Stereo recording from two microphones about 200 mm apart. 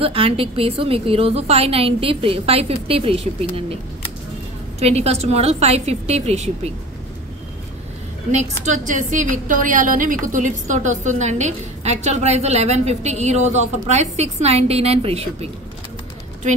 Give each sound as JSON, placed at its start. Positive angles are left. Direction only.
{"t": 0.0, "sound": "a woman's voice", "side_deg": -25}
{"t": 4.7, "sound": "a woman's voice", "side_deg": -30}
{"t": 8.6, "sound": "a woman's voice", "side_deg": -40}